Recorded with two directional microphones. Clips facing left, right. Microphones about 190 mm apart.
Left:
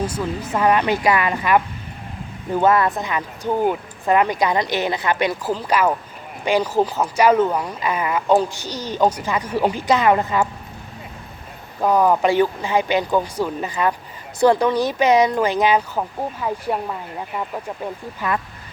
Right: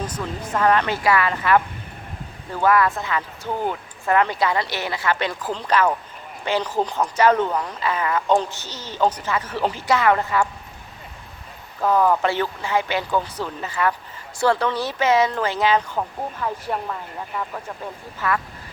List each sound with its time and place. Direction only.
0.0 s speech: 10° left (ahead or behind)
11.8 s speech: 15° left (ahead or behind)